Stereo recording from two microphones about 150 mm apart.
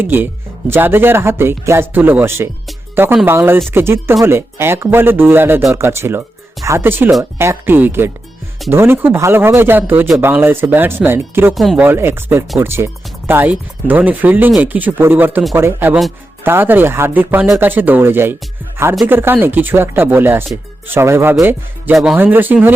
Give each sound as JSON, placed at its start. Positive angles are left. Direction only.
{"t": 0.0, "sound": "speech", "side_deg": -15}
{"t": 11.5, "sound": "speech", "side_deg": 0}
{"t": 11.9, "sound": "speech", "side_deg": -15}